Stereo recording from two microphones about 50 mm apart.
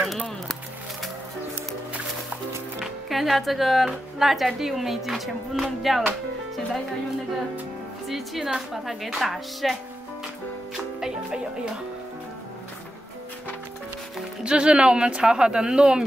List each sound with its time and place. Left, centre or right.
2.8 s speech: centre
8.1 s speech: centre
11.0 s music: centre
14.4 s speech: centre